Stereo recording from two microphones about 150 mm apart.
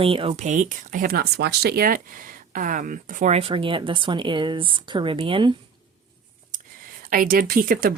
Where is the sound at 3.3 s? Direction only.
40° right (ahead or behind).